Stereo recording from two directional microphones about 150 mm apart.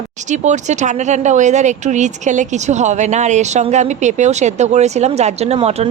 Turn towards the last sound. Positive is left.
turn(degrees=-40)  # may be behind; listen again after turning